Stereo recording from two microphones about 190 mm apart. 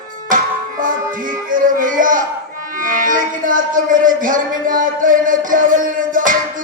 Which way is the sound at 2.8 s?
45° right (ahead or behind).